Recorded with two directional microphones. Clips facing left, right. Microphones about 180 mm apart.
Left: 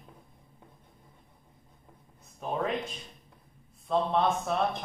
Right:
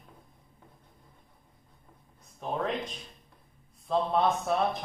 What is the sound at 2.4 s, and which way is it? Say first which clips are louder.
Speech: left 1 dB; 5° left (ahead or behind).